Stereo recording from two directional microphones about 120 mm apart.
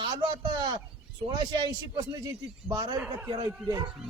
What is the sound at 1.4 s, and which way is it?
A man's voice, 40° right (ahead or behind).